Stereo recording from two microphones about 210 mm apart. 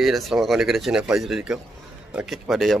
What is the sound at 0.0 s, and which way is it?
Speech, centre (ahead or behind).